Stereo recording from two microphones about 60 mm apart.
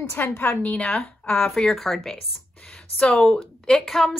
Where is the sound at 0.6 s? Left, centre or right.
Left.